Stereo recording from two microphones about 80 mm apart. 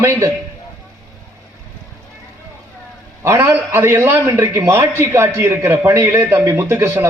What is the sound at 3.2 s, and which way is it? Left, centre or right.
A man's voice, right.